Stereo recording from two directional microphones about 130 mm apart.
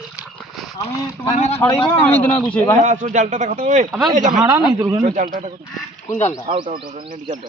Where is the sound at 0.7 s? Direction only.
25° left (ahead or behind).